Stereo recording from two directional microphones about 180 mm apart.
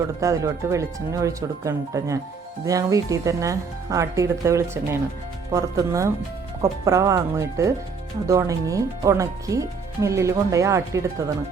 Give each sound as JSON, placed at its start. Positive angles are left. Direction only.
{"t": 0.2, "sound": "speech", "side_deg": -15}